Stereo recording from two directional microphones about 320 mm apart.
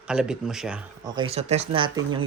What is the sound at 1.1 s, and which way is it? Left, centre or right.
Speech, centre.